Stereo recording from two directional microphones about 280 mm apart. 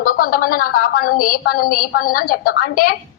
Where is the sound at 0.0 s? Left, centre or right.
Left.